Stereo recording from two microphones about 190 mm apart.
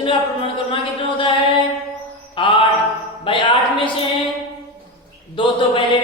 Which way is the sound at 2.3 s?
25° left (ahead or behind).